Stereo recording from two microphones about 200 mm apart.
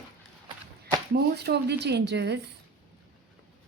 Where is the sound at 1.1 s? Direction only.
55° right (ahead or behind).